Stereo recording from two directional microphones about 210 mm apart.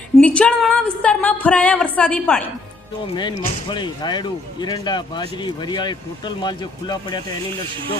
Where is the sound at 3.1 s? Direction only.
20° left (ahead or behind).